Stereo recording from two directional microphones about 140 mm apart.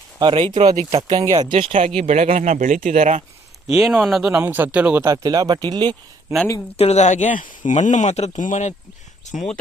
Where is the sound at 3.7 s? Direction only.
Centre (ahead or behind).